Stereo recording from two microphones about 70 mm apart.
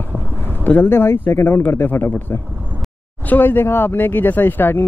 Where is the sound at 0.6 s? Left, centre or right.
Left.